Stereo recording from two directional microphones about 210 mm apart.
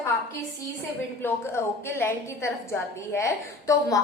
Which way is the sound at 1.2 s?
10° left (ahead or behind).